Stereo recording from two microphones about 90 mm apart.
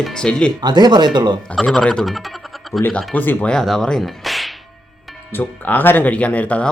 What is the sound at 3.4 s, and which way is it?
Speech, 5° left (ahead or behind).